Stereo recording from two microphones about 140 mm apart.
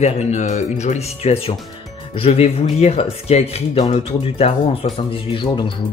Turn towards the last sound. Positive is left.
turn(degrees=35)  # may be behind; listen again after turning